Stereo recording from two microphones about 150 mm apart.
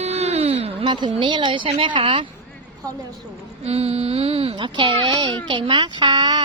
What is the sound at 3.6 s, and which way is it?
A child's voice, 45° right (ahead or behind).